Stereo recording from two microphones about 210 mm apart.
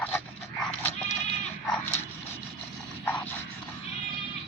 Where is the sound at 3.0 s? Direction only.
5° left (ahead or behind).